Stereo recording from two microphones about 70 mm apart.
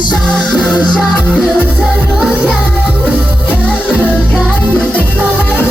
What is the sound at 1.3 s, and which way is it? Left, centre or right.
Music, left.